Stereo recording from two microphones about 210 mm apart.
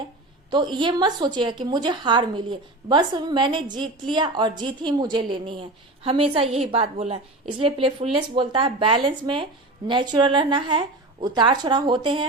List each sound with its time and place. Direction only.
0.5 s a woman's voice: 20° right (ahead or behind)